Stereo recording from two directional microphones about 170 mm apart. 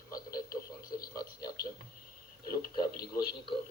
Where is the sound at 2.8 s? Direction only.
25° left (ahead or behind).